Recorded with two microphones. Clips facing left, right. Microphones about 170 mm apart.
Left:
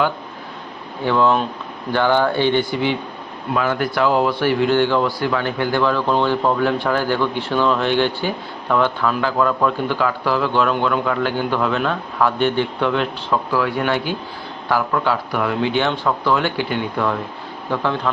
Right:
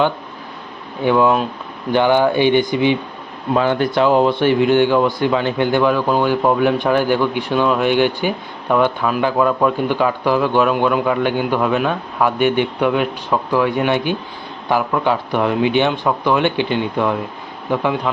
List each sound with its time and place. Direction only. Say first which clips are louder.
1.0 s speech: right 2 dB; 15° right (ahead or behind)